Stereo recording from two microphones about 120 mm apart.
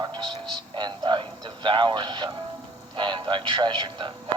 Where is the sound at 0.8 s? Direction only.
40° right (ahead or behind).